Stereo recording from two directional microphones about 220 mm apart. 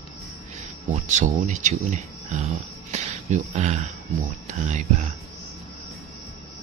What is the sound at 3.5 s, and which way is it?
Speech, 30° right (ahead or behind).